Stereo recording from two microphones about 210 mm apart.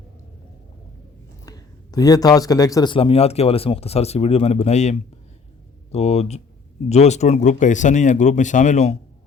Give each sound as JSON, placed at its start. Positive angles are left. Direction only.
{"t": 1.5, "sound": "speech", "side_deg": 15}